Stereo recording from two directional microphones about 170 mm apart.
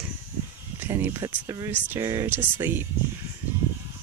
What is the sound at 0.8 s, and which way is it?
Speech, 15° right (ahead or behind).